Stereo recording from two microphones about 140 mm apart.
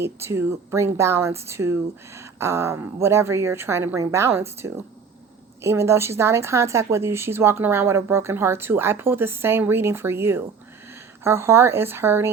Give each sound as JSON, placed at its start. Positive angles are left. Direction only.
{"t": 0.0, "sound": "speech", "side_deg": -20}